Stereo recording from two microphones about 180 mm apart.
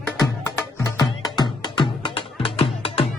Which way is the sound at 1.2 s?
25° left (ahead or behind).